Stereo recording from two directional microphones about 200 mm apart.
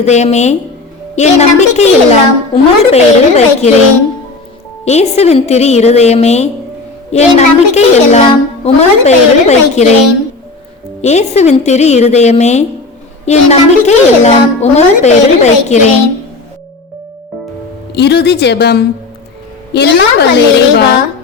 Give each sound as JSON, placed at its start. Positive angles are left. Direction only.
{"t": 0.0, "sound": "speech", "side_deg": 35}
{"t": 4.9, "sound": "speech", "side_deg": 35}
{"t": 11.0, "sound": "speech", "side_deg": 35}
{"t": 17.9, "sound": "a woman's voice", "side_deg": 55}